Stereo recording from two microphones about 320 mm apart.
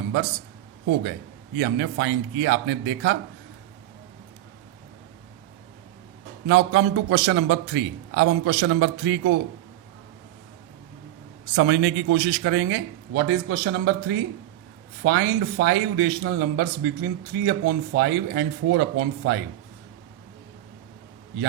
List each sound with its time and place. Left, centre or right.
1.5 s a man's voice: right
6.5 s a man's voice: right
11.5 s a man's voice: right